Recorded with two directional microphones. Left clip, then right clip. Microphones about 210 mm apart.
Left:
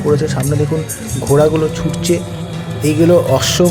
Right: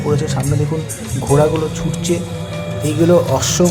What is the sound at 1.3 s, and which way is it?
Speech, 15° left (ahead or behind).